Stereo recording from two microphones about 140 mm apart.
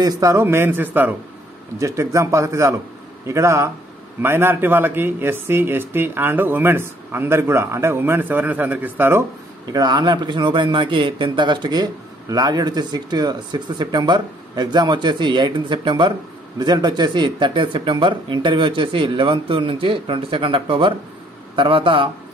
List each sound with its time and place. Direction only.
0.0 s a man's voice: 25° right (ahead or behind)
9.7 s a man's voice: 30° right (ahead or behind)